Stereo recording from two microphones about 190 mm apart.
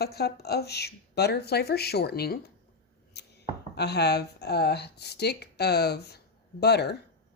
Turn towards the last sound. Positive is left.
turn(degrees=60)  # may be behind; listen again after turning